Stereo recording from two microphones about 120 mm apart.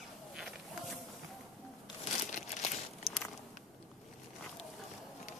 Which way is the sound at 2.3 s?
85° left.